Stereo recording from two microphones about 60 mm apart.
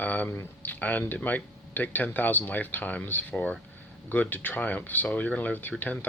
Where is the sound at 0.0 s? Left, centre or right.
Left.